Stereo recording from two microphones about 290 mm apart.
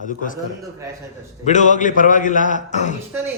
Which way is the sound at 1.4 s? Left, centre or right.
Left.